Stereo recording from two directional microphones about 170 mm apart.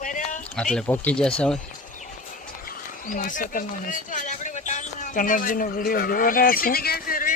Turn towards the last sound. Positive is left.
turn(degrees=60)  # may be behind; listen again after turning